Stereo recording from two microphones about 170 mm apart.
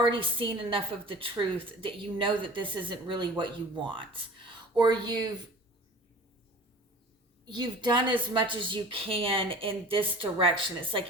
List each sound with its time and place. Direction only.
0.0 s a woman's voice: 30° right (ahead or behind)
7.4 s a woman's voice: 25° right (ahead or behind)